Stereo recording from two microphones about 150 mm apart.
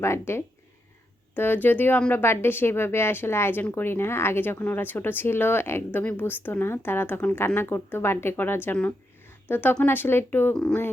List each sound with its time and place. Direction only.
0.0 s speech: 15° left (ahead or behind)